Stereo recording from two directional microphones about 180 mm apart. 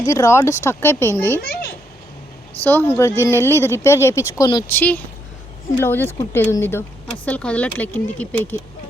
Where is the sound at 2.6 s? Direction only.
10° left (ahead or behind).